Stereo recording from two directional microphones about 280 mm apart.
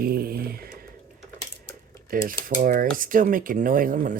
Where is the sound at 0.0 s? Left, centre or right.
Right.